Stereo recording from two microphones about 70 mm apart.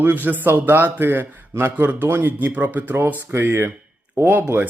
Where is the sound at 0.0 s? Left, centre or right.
Right.